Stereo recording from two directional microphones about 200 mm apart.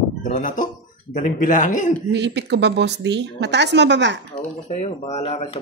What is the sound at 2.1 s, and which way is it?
A woman's voice, 60° right (ahead or behind).